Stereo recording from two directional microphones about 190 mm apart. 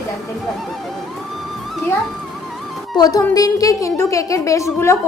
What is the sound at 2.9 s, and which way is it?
A woman's voice, 20° left (ahead or behind).